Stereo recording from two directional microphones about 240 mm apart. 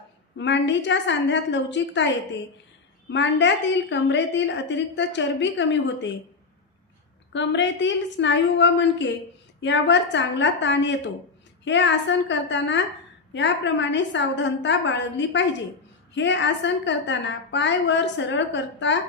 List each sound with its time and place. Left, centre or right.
0.3 s a woman's voice: left
3.1 s a woman's voice: left
7.3 s a woman's voice: left